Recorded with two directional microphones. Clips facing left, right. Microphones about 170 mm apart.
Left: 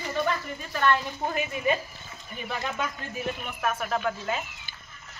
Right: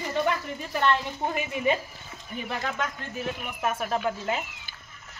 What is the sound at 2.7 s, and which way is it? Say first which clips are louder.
Speech: even; 5° left (ahead or behind).